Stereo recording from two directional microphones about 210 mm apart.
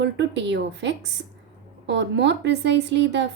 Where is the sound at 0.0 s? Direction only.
55° right (ahead or behind).